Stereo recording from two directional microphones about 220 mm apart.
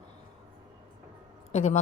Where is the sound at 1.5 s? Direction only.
30° left (ahead or behind).